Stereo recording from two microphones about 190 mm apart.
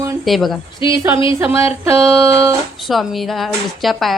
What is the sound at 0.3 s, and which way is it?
Speech, centre (ahead or behind).